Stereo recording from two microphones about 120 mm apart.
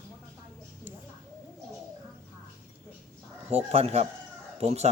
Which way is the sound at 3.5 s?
60° right (ahead or behind).